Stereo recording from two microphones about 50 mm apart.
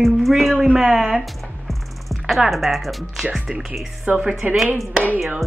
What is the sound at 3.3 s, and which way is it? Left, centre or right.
Speech, centre.